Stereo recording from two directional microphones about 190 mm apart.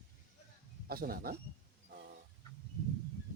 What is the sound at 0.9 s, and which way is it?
Speech, 50° right (ahead or behind).